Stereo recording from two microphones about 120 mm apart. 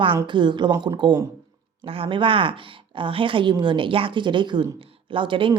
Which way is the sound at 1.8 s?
50° right (ahead or behind).